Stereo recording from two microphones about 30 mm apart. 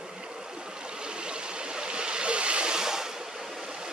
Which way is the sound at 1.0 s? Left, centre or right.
Right.